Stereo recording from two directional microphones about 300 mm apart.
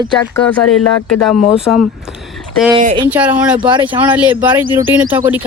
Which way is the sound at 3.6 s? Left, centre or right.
Centre.